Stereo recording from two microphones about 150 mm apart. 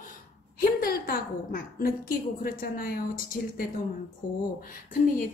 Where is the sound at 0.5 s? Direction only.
80° left.